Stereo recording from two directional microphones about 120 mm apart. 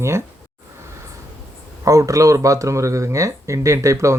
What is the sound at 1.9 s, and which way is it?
Speech, 25° right (ahead or behind).